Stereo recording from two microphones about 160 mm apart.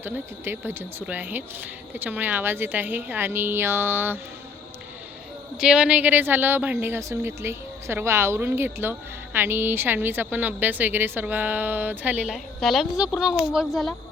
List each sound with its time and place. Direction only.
0.0 s speech: 10° right (ahead or behind)
5.5 s speech: 5° right (ahead or behind)